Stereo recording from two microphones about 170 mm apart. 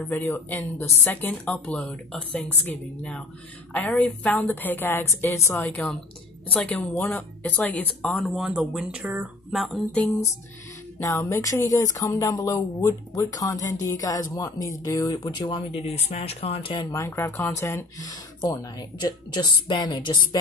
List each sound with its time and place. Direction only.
0.1 s speech: 10° left (ahead or behind); by 16.9 s 30° left (ahead or behind)
16.9 s speech: 15° left (ahead or behind)